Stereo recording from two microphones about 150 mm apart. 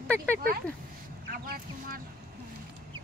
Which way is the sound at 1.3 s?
80° right.